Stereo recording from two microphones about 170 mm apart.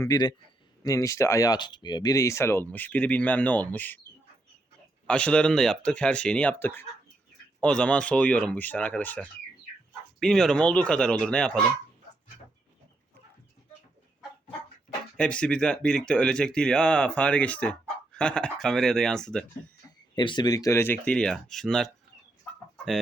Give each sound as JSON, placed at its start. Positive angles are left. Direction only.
{"t": 0.0, "sound": "a man's voice", "side_deg": 20}
{"t": 5.0, "sound": "speech", "side_deg": 5}
{"t": 15.2, "sound": "speech", "side_deg": 5}
{"t": 20.1, "sound": "speech", "side_deg": 25}